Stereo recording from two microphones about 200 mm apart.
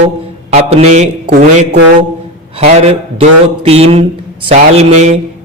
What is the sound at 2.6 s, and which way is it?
Speech, 30° right (ahead or behind).